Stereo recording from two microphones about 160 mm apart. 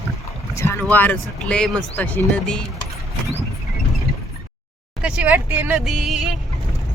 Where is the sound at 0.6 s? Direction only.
15° left (ahead or behind).